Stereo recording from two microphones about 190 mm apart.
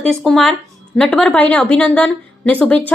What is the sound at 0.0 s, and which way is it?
A woman's voice, centre (ahead or behind).